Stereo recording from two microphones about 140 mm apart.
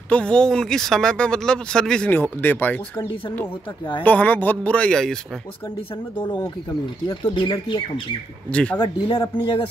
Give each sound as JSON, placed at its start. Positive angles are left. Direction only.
{"t": 0.1, "sound": "speech", "side_deg": 5}
{"t": 7.1, "sound": "speech", "side_deg": 35}
{"t": 8.5, "sound": "speech", "side_deg": 10}
{"t": 8.7, "sound": "speech", "side_deg": 35}